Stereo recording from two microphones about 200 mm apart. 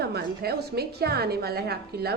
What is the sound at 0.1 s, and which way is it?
A woman's voice, 55° right (ahead or behind).